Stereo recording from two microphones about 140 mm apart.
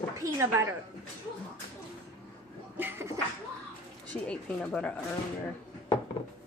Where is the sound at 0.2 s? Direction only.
20° right (ahead or behind).